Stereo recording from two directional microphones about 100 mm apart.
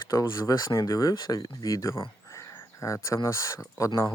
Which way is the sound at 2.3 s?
30° left (ahead or behind).